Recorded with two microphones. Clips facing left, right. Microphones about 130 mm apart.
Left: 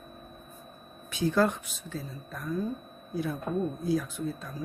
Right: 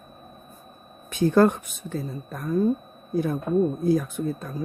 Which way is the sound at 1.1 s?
50° right (ahead or behind).